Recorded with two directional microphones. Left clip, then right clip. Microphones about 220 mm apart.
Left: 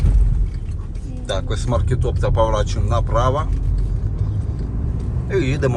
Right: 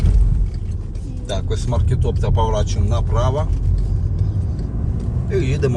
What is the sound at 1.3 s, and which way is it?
A woman's voice, centre (ahead or behind).